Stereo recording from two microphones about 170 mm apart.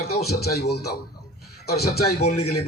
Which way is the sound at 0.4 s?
70° left (ahead or behind).